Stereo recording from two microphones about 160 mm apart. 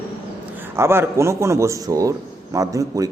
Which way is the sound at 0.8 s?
15° right (ahead or behind).